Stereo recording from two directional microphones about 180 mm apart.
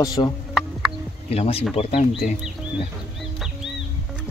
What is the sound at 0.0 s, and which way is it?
Speech, 20° left (ahead or behind).